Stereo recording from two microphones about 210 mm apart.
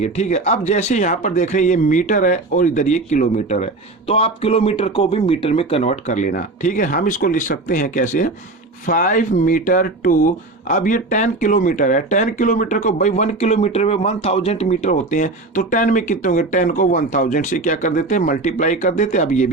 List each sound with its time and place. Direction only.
0.0 s speech: 35° left (ahead or behind)